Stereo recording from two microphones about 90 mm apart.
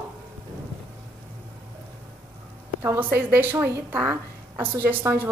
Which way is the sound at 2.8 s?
25° right (ahead or behind).